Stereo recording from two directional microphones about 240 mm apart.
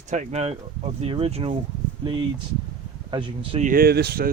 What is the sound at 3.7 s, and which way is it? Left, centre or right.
Speech, right.